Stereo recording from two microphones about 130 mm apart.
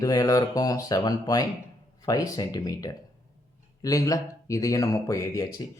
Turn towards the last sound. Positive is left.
turn(degrees=25)  # may be behind; listen again after turning